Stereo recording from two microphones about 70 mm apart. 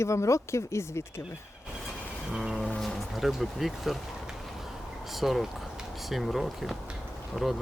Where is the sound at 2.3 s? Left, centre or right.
Centre.